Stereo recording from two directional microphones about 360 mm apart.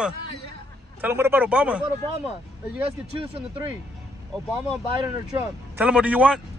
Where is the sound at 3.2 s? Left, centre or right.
Centre.